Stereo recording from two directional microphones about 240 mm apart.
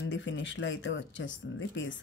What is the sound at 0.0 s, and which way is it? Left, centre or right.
Speech, left.